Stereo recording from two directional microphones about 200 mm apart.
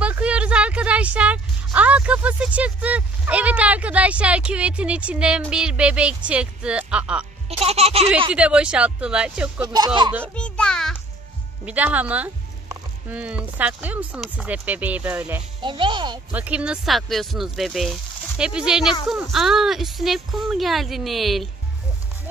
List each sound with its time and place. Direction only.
0.0 s speech: 5° right (ahead or behind)
7.4 s speech: 30° right (ahead or behind)
8.3 s speech: 5° right (ahead or behind)
9.6 s speech: 20° right (ahead or behind)
10.2 s music: 5° left (ahead or behind)
11.6 s speech: 5° right (ahead or behind)
15.6 s speech: 25° right (ahead or behind)
16.3 s speech: 5° right (ahead or behind)